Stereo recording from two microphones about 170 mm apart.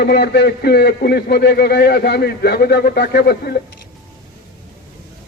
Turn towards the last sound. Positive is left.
turn(degrees=70)  # may be behind; listen again after turning